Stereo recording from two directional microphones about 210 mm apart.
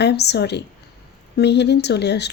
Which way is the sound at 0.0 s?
55° left (ahead or behind).